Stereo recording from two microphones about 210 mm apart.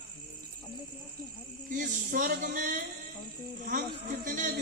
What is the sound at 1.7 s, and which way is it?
A man's voice, 40° right (ahead or behind).